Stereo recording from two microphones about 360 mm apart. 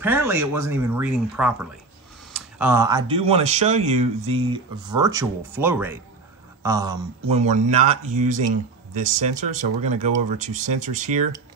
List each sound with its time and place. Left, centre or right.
0.0 s speech: centre